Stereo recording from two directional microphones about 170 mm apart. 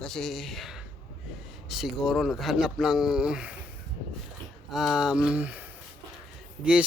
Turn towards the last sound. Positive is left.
turn(degrees=-5)  # may be behind; listen again after turning